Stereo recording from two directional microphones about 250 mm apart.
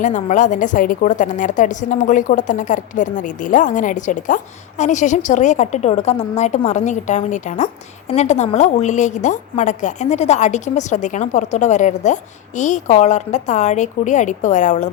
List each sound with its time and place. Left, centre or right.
0.0 s a woman's voice: left